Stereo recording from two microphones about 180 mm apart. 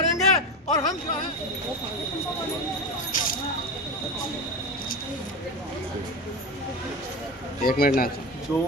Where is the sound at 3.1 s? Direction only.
50° left (ahead or behind).